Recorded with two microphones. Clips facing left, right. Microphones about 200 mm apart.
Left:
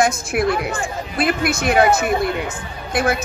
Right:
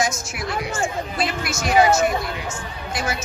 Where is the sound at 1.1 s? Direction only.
55° left (ahead or behind).